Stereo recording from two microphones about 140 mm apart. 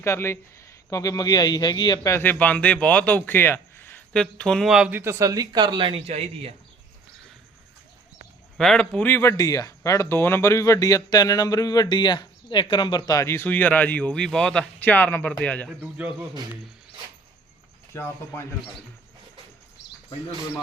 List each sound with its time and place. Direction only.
0.0 s speech: 20° left (ahead or behind)
2.1 s a man's voice: 10° left (ahead or behind); by 4.9 s 5° right (ahead or behind)
4.9 s a man's voice: 20° right (ahead or behind); by 6.5 s 45° right (ahead or behind)
8.5 s a man's voice: 5° left (ahead or behind)
15.8 s a man's voice: 10° right (ahead or behind)
17.9 s a man's voice: 15° left (ahead or behind)